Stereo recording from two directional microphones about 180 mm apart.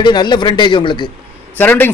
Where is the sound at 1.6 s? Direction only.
10° left (ahead or behind).